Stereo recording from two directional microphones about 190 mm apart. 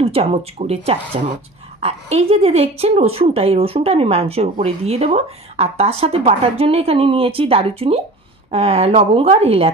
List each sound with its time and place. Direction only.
0.0 s a woman's voice: 30° right (ahead or behind)